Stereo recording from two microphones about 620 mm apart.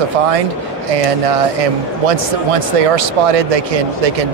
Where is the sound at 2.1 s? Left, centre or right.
Right.